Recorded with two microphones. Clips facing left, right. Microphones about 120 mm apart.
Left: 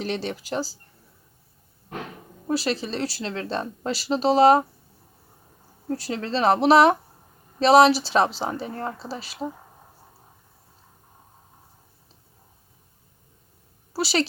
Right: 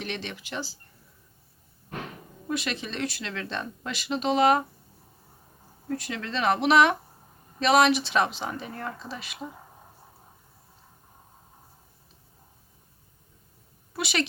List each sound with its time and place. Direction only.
0.0 s speech: 35° left (ahead or behind)
2.5 s speech: 35° left (ahead or behind)
5.9 s speech: 35° left (ahead or behind)
13.9 s a woman's voice: 35° left (ahead or behind)